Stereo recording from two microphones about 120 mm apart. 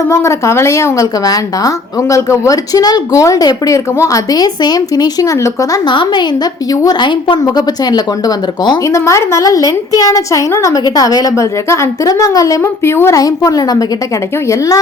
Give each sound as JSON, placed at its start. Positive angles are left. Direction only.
{"t": 0.1, "sound": "speech", "side_deg": 25}
{"t": 5.9, "sound": "a woman's voice", "side_deg": 40}
{"t": 8.9, "sound": "speech", "side_deg": 25}